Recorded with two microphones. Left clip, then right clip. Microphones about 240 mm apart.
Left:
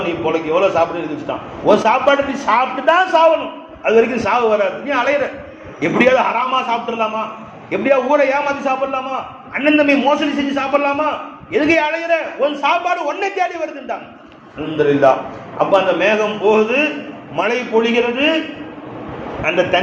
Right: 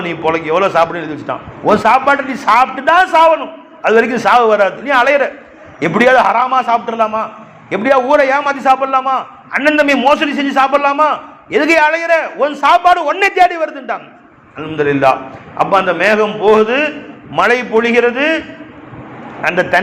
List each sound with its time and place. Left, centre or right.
0.3 s a man's voice: right
15.5 s a man's voice: right
19.4 s a man's voice: right